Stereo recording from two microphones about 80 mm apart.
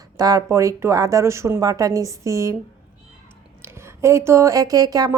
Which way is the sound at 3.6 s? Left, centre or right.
Right.